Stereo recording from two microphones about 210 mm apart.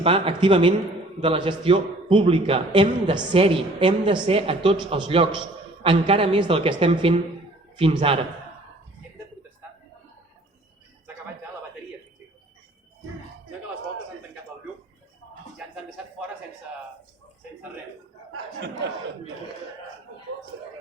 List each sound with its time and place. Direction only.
0.0 s a man's voice: 25° right (ahead or behind)